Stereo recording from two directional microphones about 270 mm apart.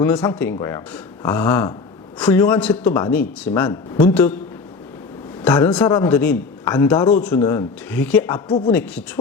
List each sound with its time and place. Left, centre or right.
0.0 s a man's voice: centre
5.4 s a man's voice: centre
8.4 s a man's voice: centre
8.7 s speech: centre